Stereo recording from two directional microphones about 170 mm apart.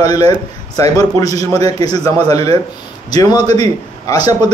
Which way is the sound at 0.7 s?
20° left (ahead or behind).